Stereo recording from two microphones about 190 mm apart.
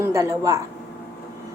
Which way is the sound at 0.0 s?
15° right (ahead or behind).